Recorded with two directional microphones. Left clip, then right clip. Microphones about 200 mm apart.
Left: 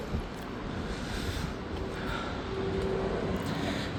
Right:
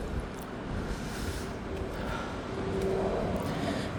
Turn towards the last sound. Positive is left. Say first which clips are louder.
# right 1 dB
turn(degrees=-20)  # may be behind; listen again after turning